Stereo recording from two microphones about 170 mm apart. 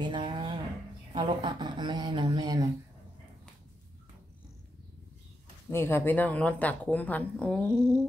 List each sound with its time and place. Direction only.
0.0 s a sound: 30° right (ahead or behind)
1.4 s speech: 25° right (ahead or behind)
5.7 s speech: 15° left (ahead or behind)